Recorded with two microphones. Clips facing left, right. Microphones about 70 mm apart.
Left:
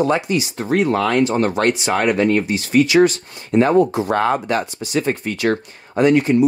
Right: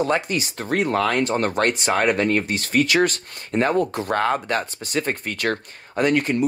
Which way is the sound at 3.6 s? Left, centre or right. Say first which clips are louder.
Left 6 dB; left.